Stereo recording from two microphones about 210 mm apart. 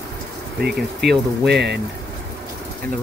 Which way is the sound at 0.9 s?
50° right (ahead or behind).